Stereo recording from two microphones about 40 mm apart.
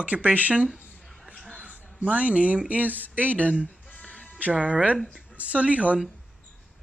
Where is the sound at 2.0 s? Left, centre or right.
Right.